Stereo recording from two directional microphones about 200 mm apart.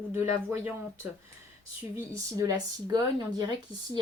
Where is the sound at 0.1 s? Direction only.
10° right (ahead or behind).